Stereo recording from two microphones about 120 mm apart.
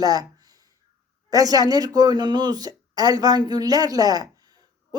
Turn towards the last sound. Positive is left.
turn(degrees=-35)  # may be behind; listen again after turning